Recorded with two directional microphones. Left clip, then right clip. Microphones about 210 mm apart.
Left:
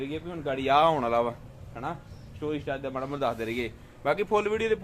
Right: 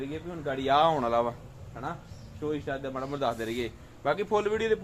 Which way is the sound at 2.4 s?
Centre (ahead or behind).